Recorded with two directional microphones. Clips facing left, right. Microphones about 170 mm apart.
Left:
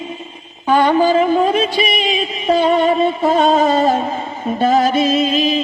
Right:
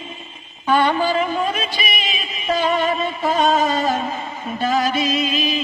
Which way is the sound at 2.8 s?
30° left (ahead or behind).